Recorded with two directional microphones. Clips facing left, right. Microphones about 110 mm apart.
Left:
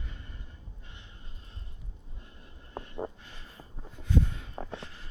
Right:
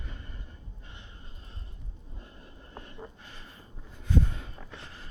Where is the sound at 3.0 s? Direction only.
30° left (ahead or behind).